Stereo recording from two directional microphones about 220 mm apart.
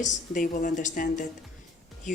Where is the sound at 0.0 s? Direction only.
35° left (ahead or behind).